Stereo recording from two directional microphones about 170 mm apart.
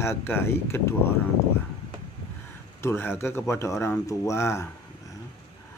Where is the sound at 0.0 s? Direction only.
15° left (ahead or behind).